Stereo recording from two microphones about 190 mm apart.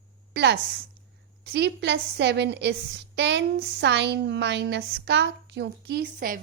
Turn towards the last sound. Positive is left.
turn(degrees=-50)  # may be behind; listen again after turning